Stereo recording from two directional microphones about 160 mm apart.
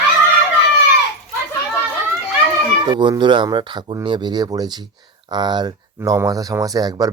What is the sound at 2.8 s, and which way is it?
Speech, 25° right (ahead or behind).